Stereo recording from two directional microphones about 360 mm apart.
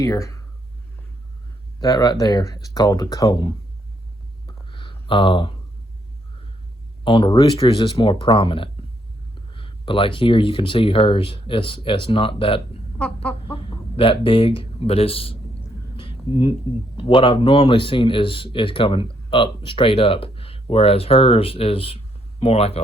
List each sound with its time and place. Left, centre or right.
0.0 s speech: centre
1.8 s a man's voice: centre
4.4 s a sound: centre
7.0 s a man's voice: centre
16.0 s a sound: centre
17.0 s a man's voice: centre